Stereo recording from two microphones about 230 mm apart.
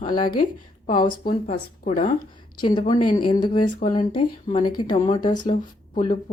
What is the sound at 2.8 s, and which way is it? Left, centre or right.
Speech, left.